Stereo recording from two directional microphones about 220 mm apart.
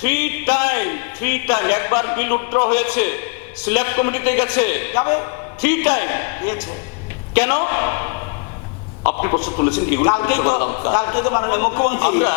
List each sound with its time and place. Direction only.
0.0 s a man's voice: 10° left (ahead or behind)
9.4 s a man's voice: 25° left (ahead or behind)